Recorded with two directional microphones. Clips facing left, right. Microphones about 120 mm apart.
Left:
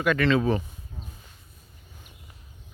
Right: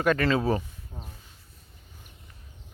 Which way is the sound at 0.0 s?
40° right (ahead or behind).